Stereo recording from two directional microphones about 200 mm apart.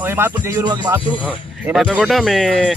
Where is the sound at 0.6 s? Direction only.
20° right (ahead or behind).